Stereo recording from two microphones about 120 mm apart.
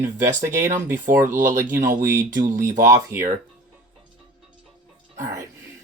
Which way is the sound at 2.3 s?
90° right.